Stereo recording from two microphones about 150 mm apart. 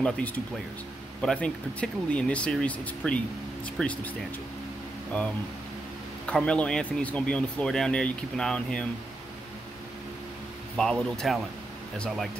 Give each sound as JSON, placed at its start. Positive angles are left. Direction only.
{"t": 0.0, "sound": "speech", "side_deg": 10}
{"t": 10.8, "sound": "speech", "side_deg": 5}